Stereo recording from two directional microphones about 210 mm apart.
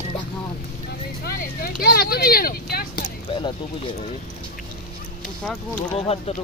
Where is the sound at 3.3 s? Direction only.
25° left (ahead or behind).